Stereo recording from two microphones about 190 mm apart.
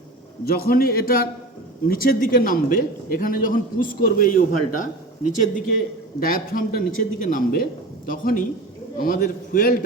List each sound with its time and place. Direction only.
0.4 s a man's voice: 55° left (ahead or behind)